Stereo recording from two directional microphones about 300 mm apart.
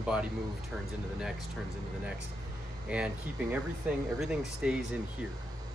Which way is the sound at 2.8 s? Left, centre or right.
Centre.